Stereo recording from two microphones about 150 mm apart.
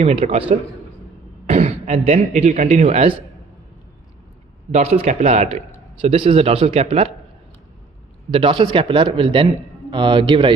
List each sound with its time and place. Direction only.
0.0 s a man's voice: 40° right (ahead or behind)
4.6 s a man's voice: 45° right (ahead or behind)
8.3 s a man's voice: 35° right (ahead or behind)